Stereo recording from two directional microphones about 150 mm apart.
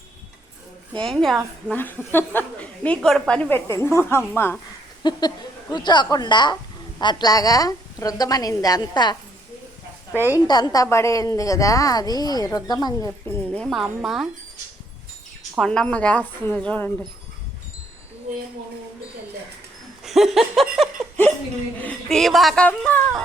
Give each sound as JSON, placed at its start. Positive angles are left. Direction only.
{"t": 0.9, "sound": "a woman's voice", "side_deg": 5}
{"t": 5.0, "sound": "a woman's voice", "side_deg": 30}
{"t": 10.3, "sound": "a woman's voice", "side_deg": 25}
{"t": 13.1, "sound": "a woman's voice", "side_deg": 10}
{"t": 15.5, "sound": "a woman's voice", "side_deg": 5}
{"t": 20.1, "sound": "laughter", "side_deg": 0}
{"t": 21.8, "sound": "a woman's voice", "side_deg": 5}